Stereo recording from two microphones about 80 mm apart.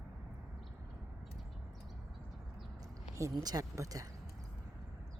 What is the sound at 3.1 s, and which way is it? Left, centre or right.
Speech, right.